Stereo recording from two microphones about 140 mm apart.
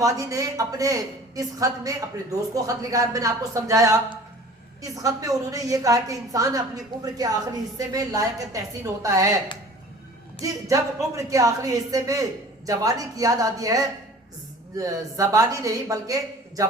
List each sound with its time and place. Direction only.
0.0 s a woman's voice: 25° right (ahead or behind)
10.4 s a woman's voice: 25° right (ahead or behind)